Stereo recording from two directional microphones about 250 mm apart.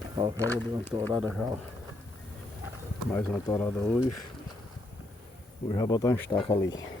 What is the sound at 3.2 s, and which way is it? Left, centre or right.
Speech, centre.